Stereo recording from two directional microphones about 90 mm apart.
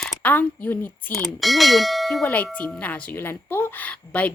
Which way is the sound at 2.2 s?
15° left (ahead or behind).